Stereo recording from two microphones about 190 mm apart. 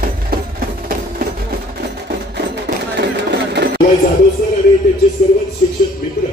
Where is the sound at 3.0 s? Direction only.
60° right (ahead or behind).